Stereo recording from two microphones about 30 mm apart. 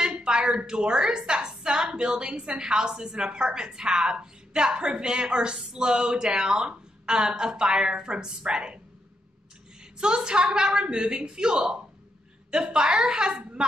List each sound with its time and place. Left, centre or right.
0.2 s a woman's voice: right
9.9 s a woman's voice: right